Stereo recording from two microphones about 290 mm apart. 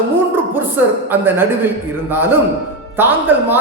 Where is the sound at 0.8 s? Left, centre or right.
Centre.